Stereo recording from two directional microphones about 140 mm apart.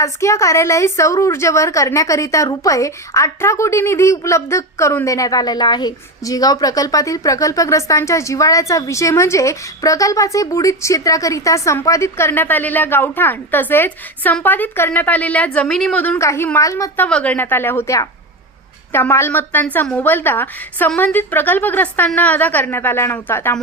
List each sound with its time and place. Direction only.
0.0 s a woman's voice: 20° left (ahead or behind)
17.1 s a woman's voice: 10° left (ahead or behind)